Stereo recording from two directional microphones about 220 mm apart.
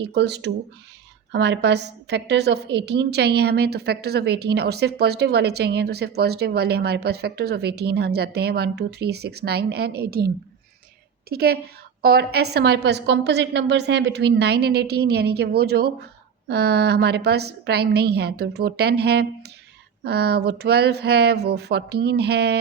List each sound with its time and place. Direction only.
0.0 s a woman's voice: 50° right (ahead or behind)